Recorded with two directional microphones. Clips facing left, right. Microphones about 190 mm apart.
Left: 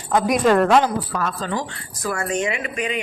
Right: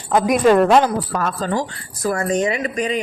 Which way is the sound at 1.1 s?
45° right (ahead or behind).